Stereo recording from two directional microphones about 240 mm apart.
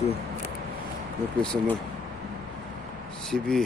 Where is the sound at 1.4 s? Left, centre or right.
Centre.